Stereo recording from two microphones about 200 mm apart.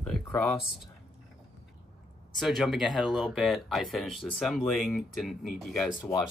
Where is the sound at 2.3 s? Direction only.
Centre (ahead or behind).